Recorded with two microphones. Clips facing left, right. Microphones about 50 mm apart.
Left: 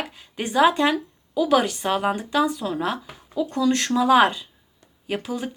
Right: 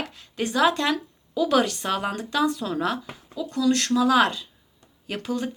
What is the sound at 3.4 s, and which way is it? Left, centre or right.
A woman's voice, left.